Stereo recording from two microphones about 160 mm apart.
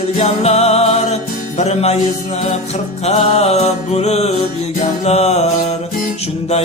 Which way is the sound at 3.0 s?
40° left (ahead or behind).